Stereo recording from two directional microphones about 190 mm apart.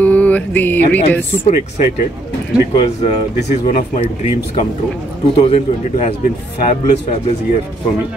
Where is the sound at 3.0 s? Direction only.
35° left (ahead or behind).